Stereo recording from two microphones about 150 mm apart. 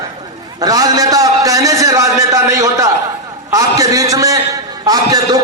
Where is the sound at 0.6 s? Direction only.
25° right (ahead or behind).